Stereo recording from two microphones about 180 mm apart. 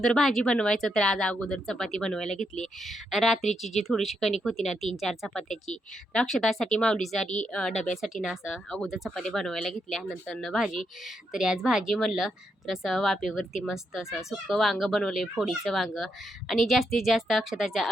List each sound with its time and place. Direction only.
0.0 s speech: 5° left (ahead or behind)